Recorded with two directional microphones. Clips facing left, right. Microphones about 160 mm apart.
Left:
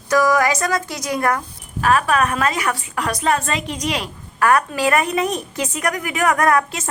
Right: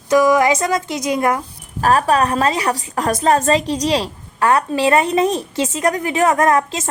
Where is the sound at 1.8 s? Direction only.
35° right (ahead or behind).